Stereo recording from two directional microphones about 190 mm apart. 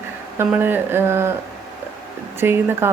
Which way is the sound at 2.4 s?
10° right (ahead or behind).